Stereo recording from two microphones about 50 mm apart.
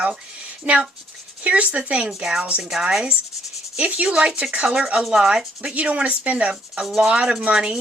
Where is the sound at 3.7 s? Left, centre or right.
Right.